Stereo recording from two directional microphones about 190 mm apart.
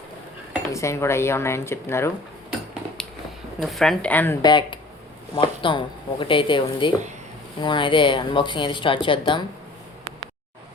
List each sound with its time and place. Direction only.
0.7 s speech: 15° left (ahead or behind)
3.6 s speech: centre (ahead or behind)
4.4 s speech: 25° left (ahead or behind)